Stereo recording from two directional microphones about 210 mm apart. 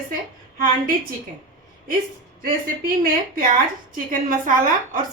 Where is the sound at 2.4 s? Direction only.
45° right (ahead or behind).